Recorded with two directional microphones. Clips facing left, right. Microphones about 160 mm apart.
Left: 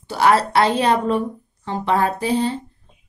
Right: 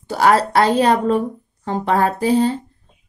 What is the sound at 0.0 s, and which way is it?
A woman's voice, 45° right (ahead or behind).